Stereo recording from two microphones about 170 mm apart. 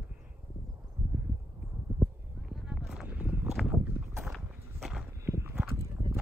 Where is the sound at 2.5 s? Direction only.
Centre (ahead or behind).